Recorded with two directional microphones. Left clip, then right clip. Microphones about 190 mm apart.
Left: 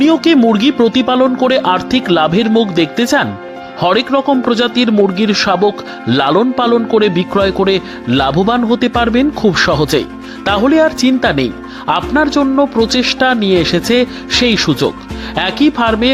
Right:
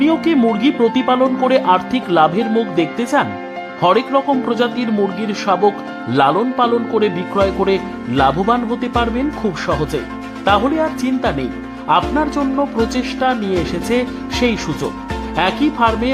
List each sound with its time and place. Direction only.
0.0 s speech: 20° left (ahead or behind)